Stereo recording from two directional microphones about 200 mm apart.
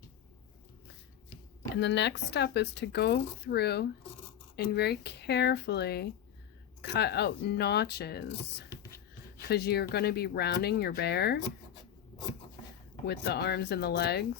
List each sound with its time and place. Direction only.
1.7 s speech: 60° left (ahead or behind)
8.7 s beatboxing: 15° left (ahead or behind)
9.5 s speech: 55° left (ahead or behind)
13.1 s speech: 55° left (ahead or behind)